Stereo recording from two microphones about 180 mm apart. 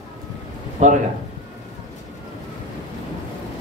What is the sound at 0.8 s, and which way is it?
Speech, 40° right (ahead or behind).